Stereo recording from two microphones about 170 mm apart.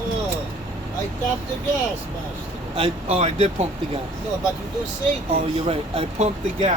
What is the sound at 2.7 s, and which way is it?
Speech, 35° right (ahead or behind).